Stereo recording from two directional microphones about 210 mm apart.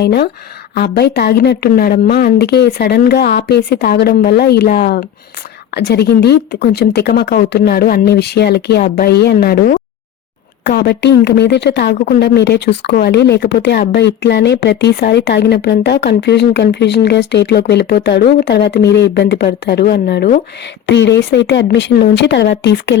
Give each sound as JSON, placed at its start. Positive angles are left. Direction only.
{"t": 0.0, "sound": "speech", "side_deg": 50}
{"t": 5.7, "sound": "speech", "side_deg": 50}